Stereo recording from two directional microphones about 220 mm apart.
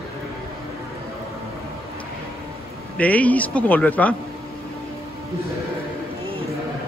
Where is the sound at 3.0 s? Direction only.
5° left (ahead or behind).